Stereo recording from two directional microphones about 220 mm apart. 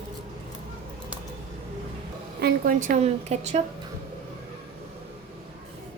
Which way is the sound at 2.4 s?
45° right (ahead or behind).